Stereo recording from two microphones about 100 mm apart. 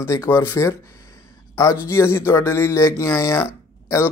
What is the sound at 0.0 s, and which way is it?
Speech, 30° left (ahead or behind).